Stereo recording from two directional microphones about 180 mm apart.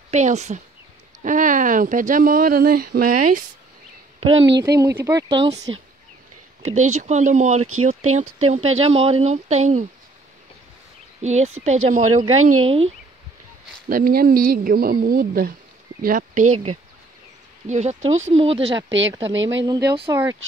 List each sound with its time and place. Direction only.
0.1 s speech: 40° right (ahead or behind)
4.6 s speech: 20° right (ahead or behind)
6.6 s speech: 40° right (ahead or behind)
11.2 s speech: 40° right (ahead or behind)
13.8 s speech: 55° right (ahead or behind)
17.6 s speech: 40° right (ahead or behind)
18.9 s speech: 90° right
19.9 s speech: 20° right (ahead or behind)